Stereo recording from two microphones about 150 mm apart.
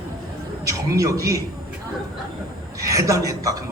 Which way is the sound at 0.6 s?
20° right (ahead or behind).